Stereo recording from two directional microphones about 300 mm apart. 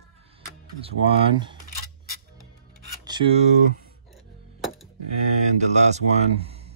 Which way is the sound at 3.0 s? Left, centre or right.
Centre.